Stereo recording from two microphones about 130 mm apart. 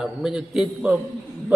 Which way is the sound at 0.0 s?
5° right (ahead or behind).